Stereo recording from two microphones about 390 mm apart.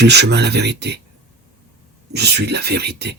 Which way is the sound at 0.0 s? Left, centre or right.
Right.